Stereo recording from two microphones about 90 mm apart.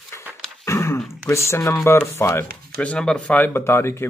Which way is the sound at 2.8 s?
10° left (ahead or behind).